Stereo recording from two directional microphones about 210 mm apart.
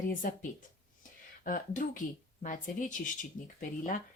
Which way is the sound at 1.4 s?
40° left (ahead or behind).